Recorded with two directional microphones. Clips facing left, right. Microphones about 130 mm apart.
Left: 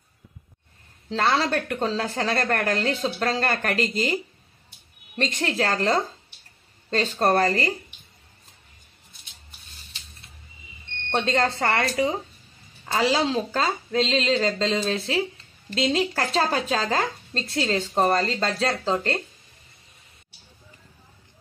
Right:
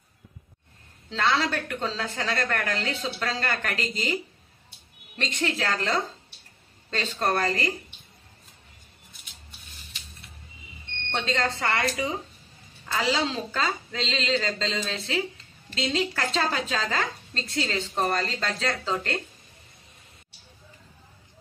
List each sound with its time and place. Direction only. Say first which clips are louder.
1.1 s a woman's voice: left 3 dB; 40° left (ahead or behind)
11.1 s a woman's voice: left 5 dB; 45° left (ahead or behind)